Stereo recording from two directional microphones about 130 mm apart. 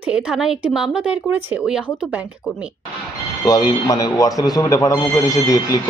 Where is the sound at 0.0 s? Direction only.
5° right (ahead or behind).